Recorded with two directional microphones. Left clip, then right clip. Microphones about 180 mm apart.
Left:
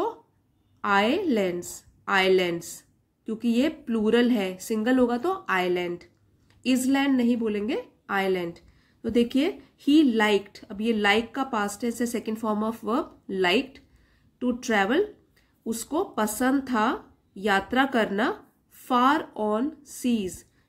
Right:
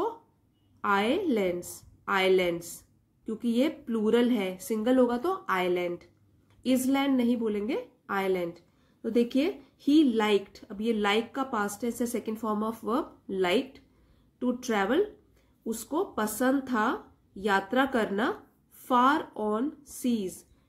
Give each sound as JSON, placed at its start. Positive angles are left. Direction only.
{"t": 0.7, "sound": "speech", "side_deg": 15}